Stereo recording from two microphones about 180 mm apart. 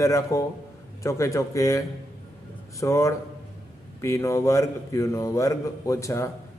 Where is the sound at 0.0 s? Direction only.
15° left (ahead or behind).